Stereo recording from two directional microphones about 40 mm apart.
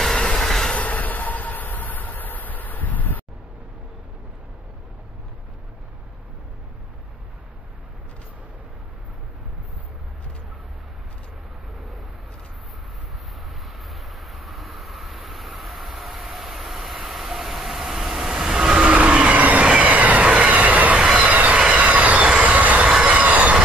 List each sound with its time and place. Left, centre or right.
0.0 s train: centre
0.7 s train: left
13.6 s vehicle: centre
18.9 s vehicle: right
19.8 s train: right